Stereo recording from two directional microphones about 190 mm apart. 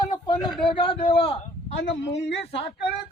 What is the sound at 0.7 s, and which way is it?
Speech, 25° left (ahead or behind).